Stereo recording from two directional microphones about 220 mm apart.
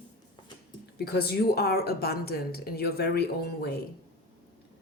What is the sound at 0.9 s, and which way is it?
A woman's voice, 45° left (ahead or behind).